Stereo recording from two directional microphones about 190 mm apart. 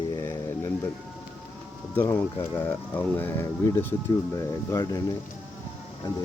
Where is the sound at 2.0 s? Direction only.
10° left (ahead or behind).